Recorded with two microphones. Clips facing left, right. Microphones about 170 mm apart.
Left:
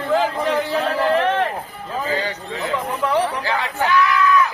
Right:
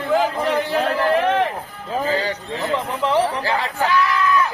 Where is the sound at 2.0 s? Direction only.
35° right (ahead or behind).